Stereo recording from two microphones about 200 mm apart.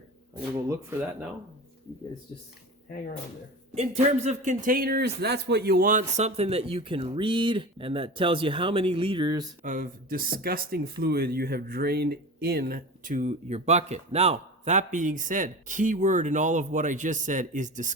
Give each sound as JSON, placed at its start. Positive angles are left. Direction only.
{"t": 0.7, "sound": "speech", "side_deg": -10}
{"t": 3.8, "sound": "speech", "side_deg": -35}
{"t": 9.6, "sound": "speech", "side_deg": -45}